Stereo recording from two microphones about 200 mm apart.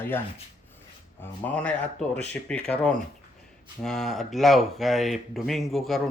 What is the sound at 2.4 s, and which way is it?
Speech, 5° left (ahead or behind).